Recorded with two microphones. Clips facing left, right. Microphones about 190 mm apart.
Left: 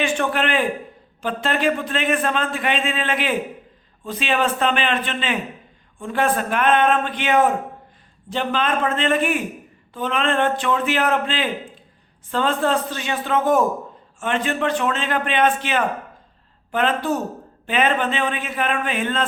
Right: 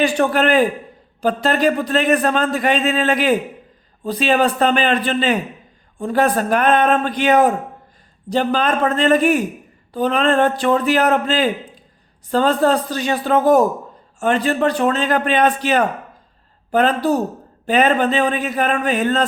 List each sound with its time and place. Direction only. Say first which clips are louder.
0.0 s a man's voice: right 5 dB; 40° right (ahead or behind)